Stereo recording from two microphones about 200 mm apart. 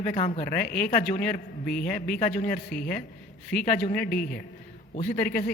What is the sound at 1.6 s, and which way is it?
Speech, 5° left (ahead or behind).